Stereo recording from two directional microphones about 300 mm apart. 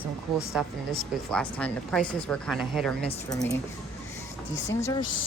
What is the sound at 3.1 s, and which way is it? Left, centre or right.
Speech, centre.